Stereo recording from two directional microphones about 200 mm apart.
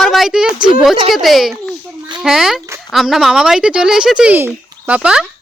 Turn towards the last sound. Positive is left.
turn(degrees=-5)  # may be behind; listen again after turning